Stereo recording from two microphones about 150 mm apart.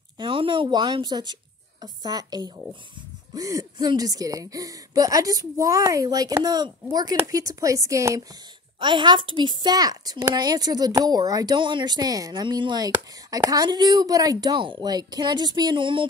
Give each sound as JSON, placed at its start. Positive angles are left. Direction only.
{"t": 0.2, "sound": "a woman's voice", "side_deg": -35}
{"t": 8.7, "sound": "a woman's voice", "side_deg": -30}